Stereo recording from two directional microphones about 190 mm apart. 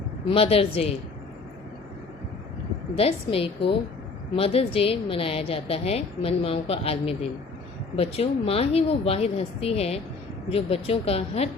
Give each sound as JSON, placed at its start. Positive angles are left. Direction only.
{"t": 0.3, "sound": "a woman's voice", "side_deg": 30}
{"t": 2.9, "sound": "a woman's voice", "side_deg": 30}